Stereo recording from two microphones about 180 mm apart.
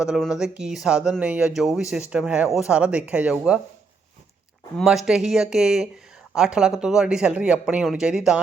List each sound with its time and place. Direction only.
0.0 s speech: centre (ahead or behind)
4.8 s speech: centre (ahead or behind)